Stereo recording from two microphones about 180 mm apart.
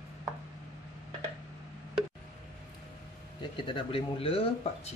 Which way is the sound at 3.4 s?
25° left (ahead or behind).